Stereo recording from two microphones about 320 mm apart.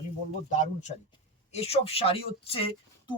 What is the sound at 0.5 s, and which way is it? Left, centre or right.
Speech, left.